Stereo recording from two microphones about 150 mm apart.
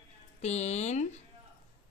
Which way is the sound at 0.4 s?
45° left (ahead or behind).